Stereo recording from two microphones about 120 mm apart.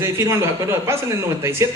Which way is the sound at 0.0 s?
20° right (ahead or behind).